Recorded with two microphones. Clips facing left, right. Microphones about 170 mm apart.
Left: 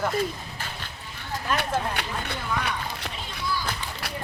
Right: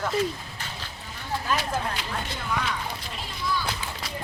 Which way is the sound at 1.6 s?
65° left (ahead or behind).